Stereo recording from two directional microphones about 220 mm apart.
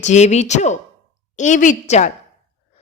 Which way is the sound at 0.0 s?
30° left (ahead or behind).